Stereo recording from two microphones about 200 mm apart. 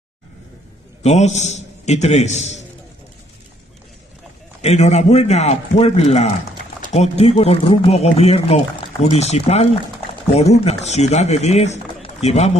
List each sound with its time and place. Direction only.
1.0 s a man's voice: 35° left (ahead or behind)
4.6 s a man's voice: 35° left (ahead or behind)